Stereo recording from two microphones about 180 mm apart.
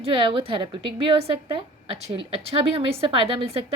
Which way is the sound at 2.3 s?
35° right (ahead or behind).